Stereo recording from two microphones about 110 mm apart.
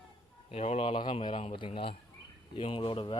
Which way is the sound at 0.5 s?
70° left (ahead or behind).